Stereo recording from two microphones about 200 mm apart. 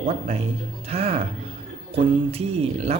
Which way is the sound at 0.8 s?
30° right (ahead or behind).